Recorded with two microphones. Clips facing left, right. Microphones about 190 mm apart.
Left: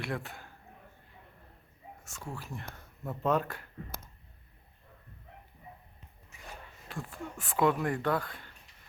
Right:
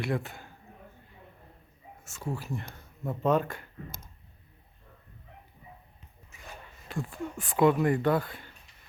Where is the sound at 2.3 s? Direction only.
5° right (ahead or behind).